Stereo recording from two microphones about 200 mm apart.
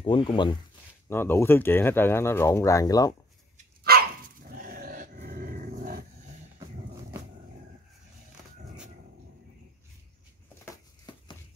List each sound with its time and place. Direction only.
0.0 s speech: 25° left (ahead or behind)
1.0 s speech: 10° left (ahead or behind)
3.9 s dog: 50° right (ahead or behind)
10.6 s a sound: 20° left (ahead or behind)